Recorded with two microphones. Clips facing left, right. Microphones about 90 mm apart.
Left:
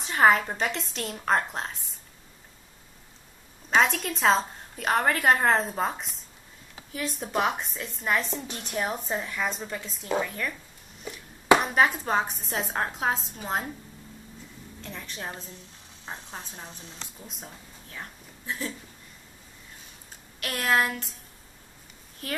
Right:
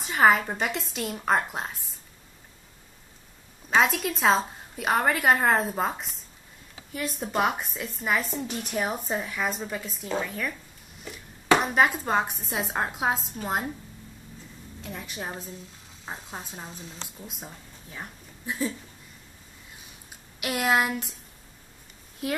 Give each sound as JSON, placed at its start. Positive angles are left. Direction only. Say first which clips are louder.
{"t": 0.0, "sound": "a woman's voice", "louder": "even", "side_deg": 0}
{"t": 3.7, "sound": "a woman's voice", "louder": "even", "side_deg": 0}
{"t": 14.8, "sound": "a woman's voice", "louder": "right 2 dB", "side_deg": -10}
{"t": 17.2, "sound": "a woman's voice", "louder": "right 2 dB", "side_deg": -5}
{"t": 20.1, "sound": "speech", "louder": "right 4 dB", "side_deg": -15}